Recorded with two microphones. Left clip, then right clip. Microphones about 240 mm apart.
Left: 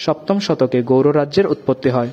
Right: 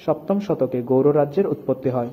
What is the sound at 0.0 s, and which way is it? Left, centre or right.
A man's voice, left.